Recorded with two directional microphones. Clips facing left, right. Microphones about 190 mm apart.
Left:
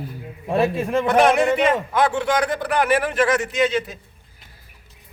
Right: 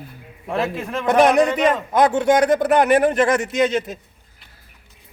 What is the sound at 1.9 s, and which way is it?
A man's voice, 45° right (ahead or behind).